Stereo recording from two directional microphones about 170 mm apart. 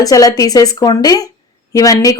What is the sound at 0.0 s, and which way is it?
Speech, 20° left (ahead or behind).